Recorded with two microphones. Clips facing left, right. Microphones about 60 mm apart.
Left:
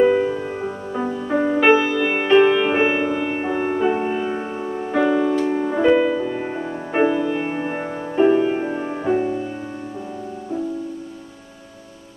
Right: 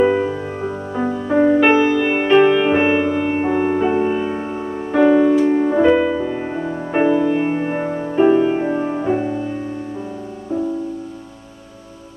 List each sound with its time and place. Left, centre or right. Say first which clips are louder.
0.0 s music: even; centre